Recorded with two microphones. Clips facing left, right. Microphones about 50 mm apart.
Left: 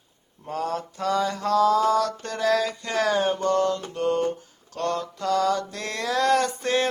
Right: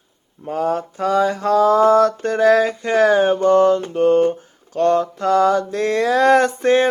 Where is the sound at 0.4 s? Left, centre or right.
Centre.